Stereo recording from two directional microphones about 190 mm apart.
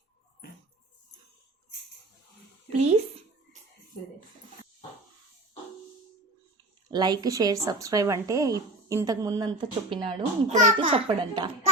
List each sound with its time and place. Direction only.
2.7 s speech: 35° right (ahead or behind)
6.9 s speech: 20° right (ahead or behind)
10.5 s speech: 40° right (ahead or behind)
10.8 s speech: 30° right (ahead or behind)